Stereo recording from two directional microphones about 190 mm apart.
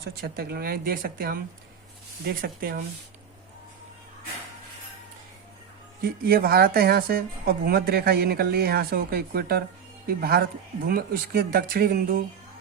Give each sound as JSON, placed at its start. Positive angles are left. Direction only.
{"t": 0.2, "sound": "a woman's voice", "side_deg": -55}
{"t": 6.0, "sound": "a woman's voice", "side_deg": -50}